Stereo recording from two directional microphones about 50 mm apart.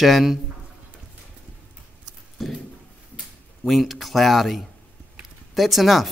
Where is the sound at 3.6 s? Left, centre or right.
Centre.